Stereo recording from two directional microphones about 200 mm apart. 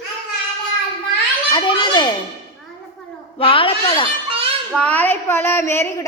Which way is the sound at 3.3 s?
25° left (ahead or behind).